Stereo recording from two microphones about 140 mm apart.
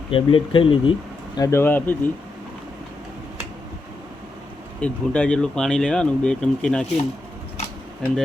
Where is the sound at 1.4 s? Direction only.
20° left (ahead or behind).